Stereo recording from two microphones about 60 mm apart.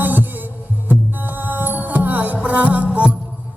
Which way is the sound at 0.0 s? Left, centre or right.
Right.